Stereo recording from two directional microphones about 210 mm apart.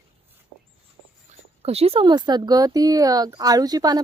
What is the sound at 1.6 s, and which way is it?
Speech, 30° right (ahead or behind).